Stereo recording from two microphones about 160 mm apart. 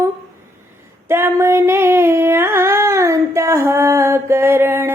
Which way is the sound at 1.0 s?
15° right (ahead or behind).